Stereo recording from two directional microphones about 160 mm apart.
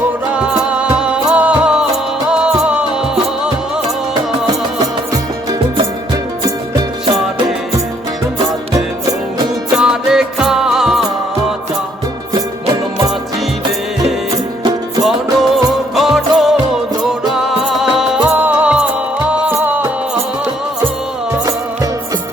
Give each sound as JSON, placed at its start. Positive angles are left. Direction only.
{"t": 0.3, "sound": "music", "side_deg": -5}
{"t": 5.1, "sound": "music", "side_deg": -20}
{"t": 9.7, "sound": "music", "side_deg": -5}
{"t": 15.0, "sound": "music", "side_deg": 0}